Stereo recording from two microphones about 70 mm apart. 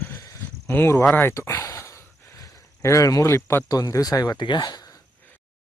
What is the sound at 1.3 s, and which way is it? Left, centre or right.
Speech, left.